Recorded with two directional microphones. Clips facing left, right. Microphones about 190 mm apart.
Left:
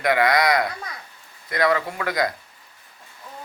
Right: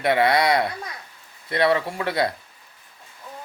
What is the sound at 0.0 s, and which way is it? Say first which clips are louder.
Speech: even; 30° right (ahead or behind).